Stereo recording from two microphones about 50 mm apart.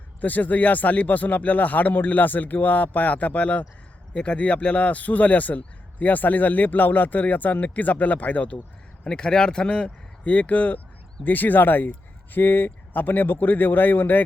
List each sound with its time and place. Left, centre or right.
0.2 s speech: left
9.0 s speech: centre; by 14.2 s left